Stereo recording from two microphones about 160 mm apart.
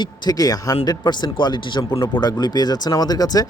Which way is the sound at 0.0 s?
25° left (ahead or behind).